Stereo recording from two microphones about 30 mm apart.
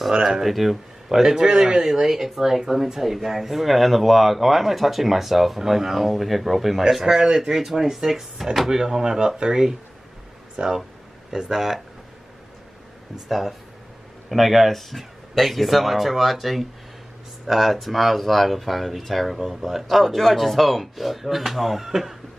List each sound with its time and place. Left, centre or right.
0.4 s speech: centre
1.2 s speech: right
7.2 s speech: right
8.6 s speech: centre
11.5 s speech: centre
13.3 s speech: centre
19.3 s speech: centre
19.6 s speech: centre